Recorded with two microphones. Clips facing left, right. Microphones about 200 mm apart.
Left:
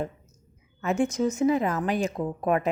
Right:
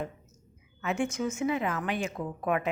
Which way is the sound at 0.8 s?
40° left (ahead or behind).